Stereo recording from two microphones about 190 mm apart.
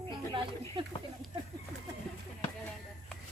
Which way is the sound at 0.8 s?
25° right (ahead or behind).